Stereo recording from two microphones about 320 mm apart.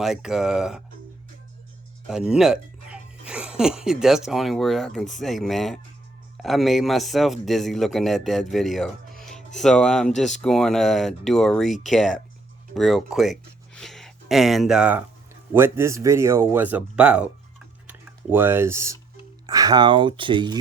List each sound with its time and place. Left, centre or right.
0.0 s speech: centre
2.0 s speech: centre